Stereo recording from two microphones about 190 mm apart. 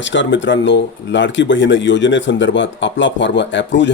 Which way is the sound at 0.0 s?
75° left (ahead or behind).